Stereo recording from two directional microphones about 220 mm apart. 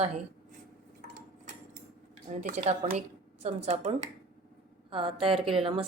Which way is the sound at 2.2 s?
35° right (ahead or behind).